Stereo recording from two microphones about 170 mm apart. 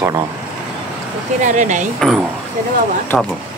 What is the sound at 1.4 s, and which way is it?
Speech, 45° right (ahead or behind).